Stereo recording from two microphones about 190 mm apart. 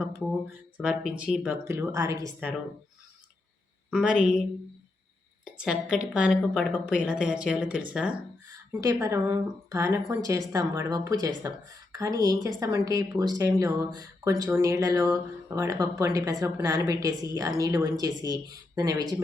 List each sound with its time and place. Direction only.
0.8 s speech: 5° right (ahead or behind)
3.9 s a woman's voice: 5° right (ahead or behind)
5.5 s a woman's voice: 5° right (ahead or behind)
8.8 s speech: 20° right (ahead or behind)